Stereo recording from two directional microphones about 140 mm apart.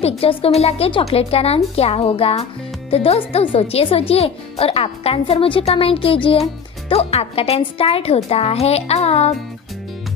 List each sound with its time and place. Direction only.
0.0 s speech: 45° left (ahead or behind)